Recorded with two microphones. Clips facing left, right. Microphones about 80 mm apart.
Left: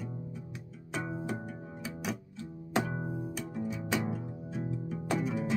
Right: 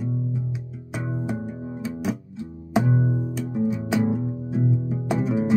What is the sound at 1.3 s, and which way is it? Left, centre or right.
Music, right.